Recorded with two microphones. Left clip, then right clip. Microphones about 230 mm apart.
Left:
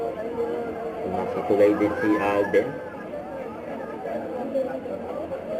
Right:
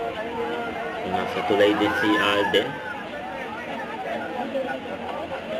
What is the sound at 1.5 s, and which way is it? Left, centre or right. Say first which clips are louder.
Speech: even; right.